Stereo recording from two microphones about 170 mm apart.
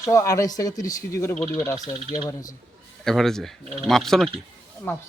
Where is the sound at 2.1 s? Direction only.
25° left (ahead or behind).